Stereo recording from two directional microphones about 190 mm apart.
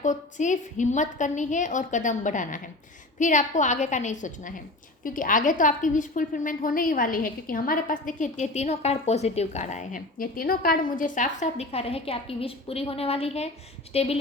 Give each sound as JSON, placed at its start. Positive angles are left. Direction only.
{"t": 0.0, "sound": "a woman's voice", "side_deg": 40}